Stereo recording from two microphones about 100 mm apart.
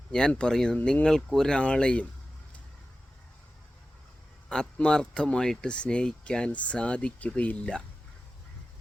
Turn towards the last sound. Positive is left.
turn(degrees=10)  # may be behind; listen again after turning